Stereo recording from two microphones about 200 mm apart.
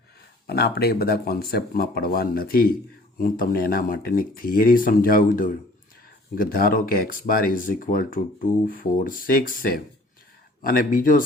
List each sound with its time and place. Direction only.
0.4 s speech: 50° left (ahead or behind)